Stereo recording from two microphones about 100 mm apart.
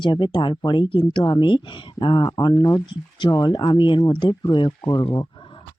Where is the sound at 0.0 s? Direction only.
50° left (ahead or behind).